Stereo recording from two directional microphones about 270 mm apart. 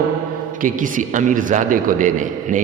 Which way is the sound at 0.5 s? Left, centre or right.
Right.